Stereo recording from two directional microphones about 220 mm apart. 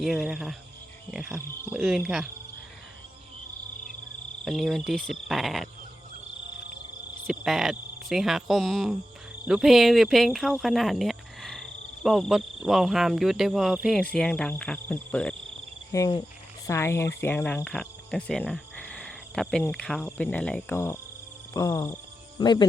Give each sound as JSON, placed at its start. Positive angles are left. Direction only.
{"t": 0.0, "sound": "speech", "side_deg": 0}
{"t": 4.4, "sound": "speech", "side_deg": 0}
{"t": 7.3, "sound": "speech", "side_deg": 0}
{"t": 15.9, "sound": "speech", "side_deg": 15}
{"t": 17.2, "sound": "cricket", "side_deg": 10}
{"t": 21.5, "sound": "speech", "side_deg": 15}